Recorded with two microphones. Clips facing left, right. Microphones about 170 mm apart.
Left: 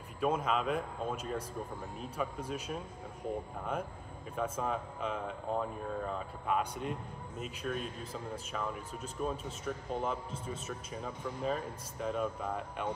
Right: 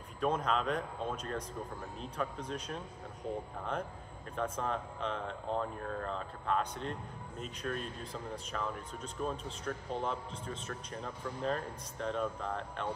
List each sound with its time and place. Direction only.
0.2 s speech: 5° left (ahead or behind)
4.4 s speech: 5° left (ahead or behind)